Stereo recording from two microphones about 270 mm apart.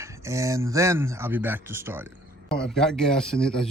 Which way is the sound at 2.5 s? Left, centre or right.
Centre.